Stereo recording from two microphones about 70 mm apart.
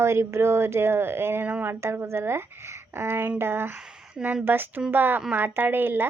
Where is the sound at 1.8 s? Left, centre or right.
Right.